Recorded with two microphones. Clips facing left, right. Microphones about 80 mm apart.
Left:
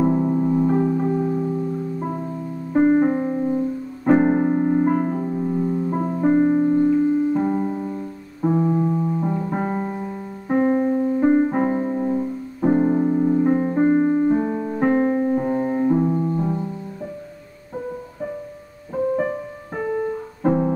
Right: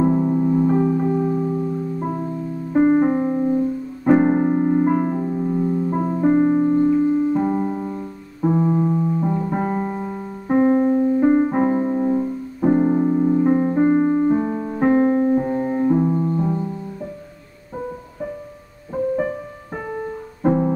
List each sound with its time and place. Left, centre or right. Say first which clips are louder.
0.0 s music: right 1 dB; centre
2.7 s piano: right 1 dB; centre
5.2 s music: right 1 dB; centre
7.5 s piano: right 1 dB; centre
8.4 s piano: right 1 dB; centre
8.9 s piano: right 2 dB; centre
9.8 s piano: right 2 dB; centre
10.5 s piano: right 3 dB; centre
12.6 s music: right 1 dB; centre
20.4 s music: right 1 dB; centre